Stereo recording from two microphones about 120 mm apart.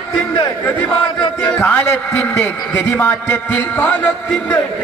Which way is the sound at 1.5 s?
20° left (ahead or behind).